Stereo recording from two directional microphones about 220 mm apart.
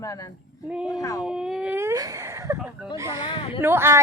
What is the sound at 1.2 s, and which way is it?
Speech, 5° right (ahead or behind).